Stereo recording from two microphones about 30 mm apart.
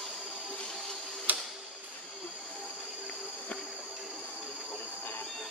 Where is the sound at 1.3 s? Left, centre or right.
Right.